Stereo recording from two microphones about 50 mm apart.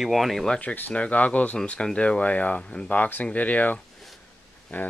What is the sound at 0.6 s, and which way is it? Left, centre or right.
Speech, left.